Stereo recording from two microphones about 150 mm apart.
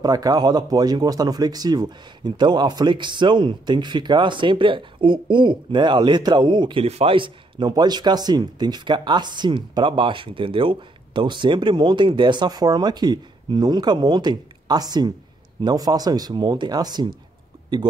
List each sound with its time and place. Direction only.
0.0 s speech: 25° right (ahead or behind)